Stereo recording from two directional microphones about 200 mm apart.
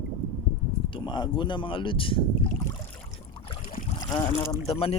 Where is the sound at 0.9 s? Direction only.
20° left (ahead or behind).